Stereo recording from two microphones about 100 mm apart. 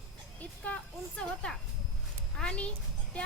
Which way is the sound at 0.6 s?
15° left (ahead or behind).